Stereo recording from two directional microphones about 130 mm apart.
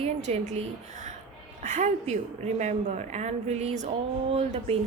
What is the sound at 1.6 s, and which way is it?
A woman's voice, 70° right (ahead or behind).